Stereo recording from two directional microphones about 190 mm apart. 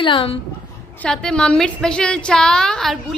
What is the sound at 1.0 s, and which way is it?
A woman's voice, 5° left (ahead or behind).